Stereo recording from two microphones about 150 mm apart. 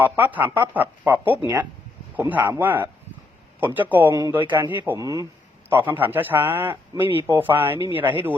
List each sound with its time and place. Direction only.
0.0 s a man's voice: 10° right (ahead or behind)
4.9 s a man's voice: 25° right (ahead or behind)